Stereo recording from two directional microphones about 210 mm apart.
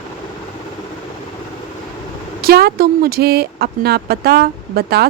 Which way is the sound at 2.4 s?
45° right (ahead or behind).